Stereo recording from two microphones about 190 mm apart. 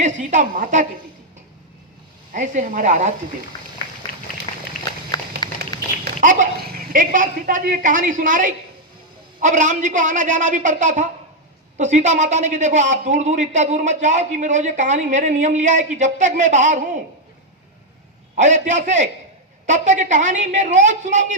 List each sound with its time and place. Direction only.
0.0 s a woman's voice: 40° right (ahead or behind)
2.3 s a man's voice: 40° right (ahead or behind)
6.1 s a man's voice: 40° right (ahead or behind)
18.3 s a man's voice: 40° right (ahead or behind)